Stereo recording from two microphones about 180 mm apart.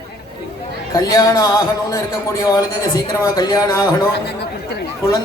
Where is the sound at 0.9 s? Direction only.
20° left (ahead or behind).